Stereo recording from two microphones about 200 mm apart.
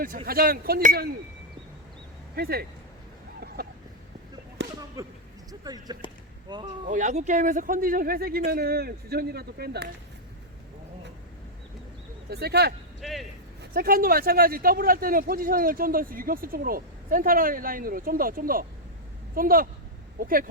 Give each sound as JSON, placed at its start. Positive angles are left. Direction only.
{"t": 0.3, "sound": "speech", "side_deg": -50}
{"t": 2.3, "sound": "speech", "side_deg": -50}
{"t": 3.6, "sound": "a sound", "side_deg": -50}
{"t": 5.0, "sound": "speech", "side_deg": -15}
{"t": 6.8, "sound": "speech", "side_deg": -40}
{"t": 12.3, "sound": "speech", "side_deg": -55}
{"t": 13.0, "sound": "speech", "side_deg": 0}
{"t": 13.6, "sound": "a woman's voice", "side_deg": -50}